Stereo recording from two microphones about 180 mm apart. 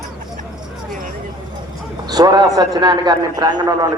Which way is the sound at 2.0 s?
20° right (ahead or behind).